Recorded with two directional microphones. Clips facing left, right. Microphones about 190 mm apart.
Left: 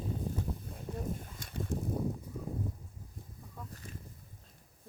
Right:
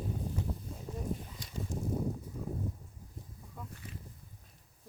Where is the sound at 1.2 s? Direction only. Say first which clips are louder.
Left 1 dB; 50° left (ahead or behind).